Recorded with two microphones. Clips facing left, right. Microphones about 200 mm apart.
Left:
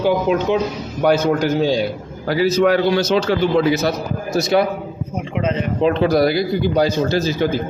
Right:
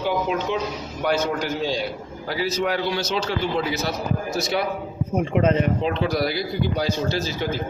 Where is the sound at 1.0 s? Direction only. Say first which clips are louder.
Left 7 dB; 40° left (ahead or behind).